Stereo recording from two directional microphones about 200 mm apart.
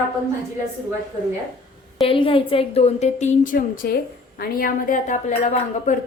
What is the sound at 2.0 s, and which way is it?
A woman's voice, 25° left (ahead or behind).